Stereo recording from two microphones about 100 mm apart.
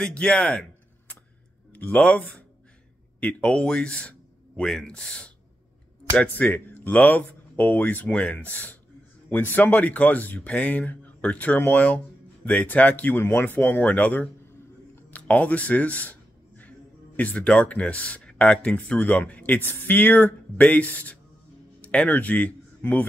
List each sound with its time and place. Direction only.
0.0 s speech: 10° left (ahead or behind)
15.0 s a sound: 15° left (ahead or behind)
17.2 s speech: 10° left (ahead or behind)